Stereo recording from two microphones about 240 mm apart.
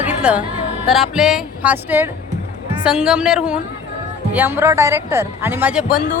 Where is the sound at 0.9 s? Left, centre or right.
Centre.